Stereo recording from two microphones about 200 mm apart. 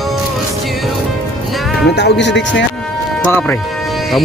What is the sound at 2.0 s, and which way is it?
Speech, 60° left (ahead or behind).